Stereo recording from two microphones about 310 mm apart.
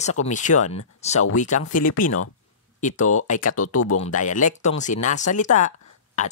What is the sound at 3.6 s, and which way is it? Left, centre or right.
Speech, left.